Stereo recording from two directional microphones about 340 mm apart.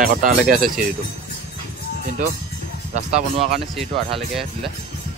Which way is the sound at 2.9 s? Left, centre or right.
Centre.